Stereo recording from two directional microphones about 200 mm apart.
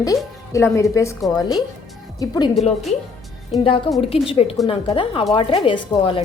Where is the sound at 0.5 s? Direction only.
15° left (ahead or behind).